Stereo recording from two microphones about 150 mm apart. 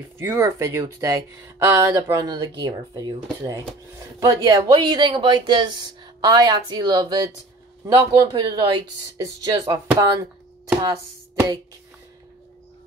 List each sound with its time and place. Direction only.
0.2 s speech: 20° right (ahead or behind)
10.7 s chopping: 20° right (ahead or behind)